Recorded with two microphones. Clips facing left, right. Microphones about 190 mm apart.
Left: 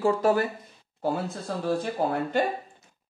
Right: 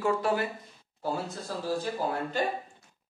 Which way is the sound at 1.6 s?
60° left (ahead or behind).